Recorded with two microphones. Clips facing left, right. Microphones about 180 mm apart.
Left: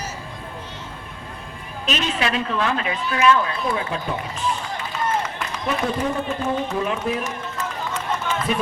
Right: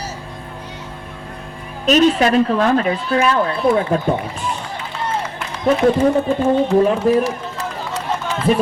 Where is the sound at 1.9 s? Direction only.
45° right (ahead or behind).